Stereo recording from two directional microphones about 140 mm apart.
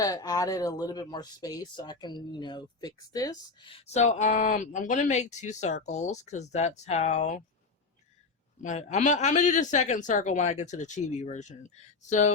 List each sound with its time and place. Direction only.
0.0 s speech: 25° left (ahead or behind)
3.7 s speech: 45° left (ahead or behind)
8.6 s speech: 55° left (ahead or behind)